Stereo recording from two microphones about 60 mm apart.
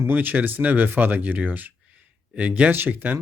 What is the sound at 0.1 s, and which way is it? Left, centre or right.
Speech, right.